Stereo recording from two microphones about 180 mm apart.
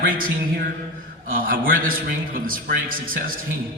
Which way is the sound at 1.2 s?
50° right (ahead or behind).